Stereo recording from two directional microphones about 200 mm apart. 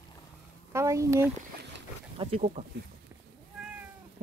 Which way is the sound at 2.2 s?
35° right (ahead or behind).